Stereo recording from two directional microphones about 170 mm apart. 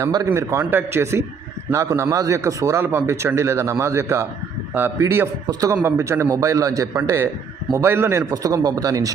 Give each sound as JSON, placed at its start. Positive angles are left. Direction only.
{"t": 0.0, "sound": "a man's voice", "side_deg": -20}